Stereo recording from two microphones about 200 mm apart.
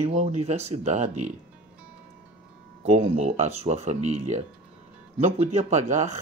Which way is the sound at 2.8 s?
35° right (ahead or behind).